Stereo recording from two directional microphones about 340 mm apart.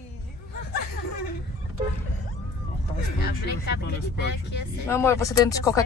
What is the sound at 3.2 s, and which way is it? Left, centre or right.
Speech, left.